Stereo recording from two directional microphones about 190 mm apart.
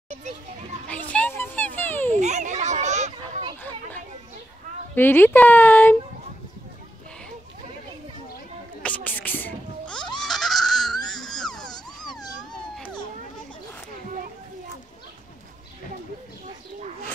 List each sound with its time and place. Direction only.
0.8 s a sound: 5° left (ahead or behind)
2.1 s children playing: 40° right (ahead or behind)
4.9 s speech: 10° left (ahead or behind)
8.8 s goat: 5° left (ahead or behind)
11.1 s a sound: centre (ahead or behind)
12.5 s cat: 5° left (ahead or behind)